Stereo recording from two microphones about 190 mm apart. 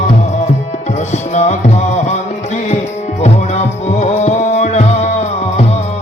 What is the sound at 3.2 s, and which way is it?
Music, 35° left (ahead or behind).